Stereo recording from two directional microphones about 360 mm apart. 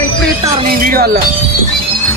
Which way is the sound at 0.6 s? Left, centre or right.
Right.